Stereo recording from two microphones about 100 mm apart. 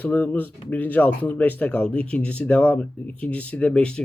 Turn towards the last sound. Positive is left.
turn(degrees=10)  # may be behind; listen again after turning